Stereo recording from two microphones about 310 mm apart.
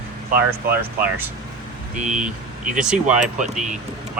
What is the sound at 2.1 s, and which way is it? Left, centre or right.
Speech, centre.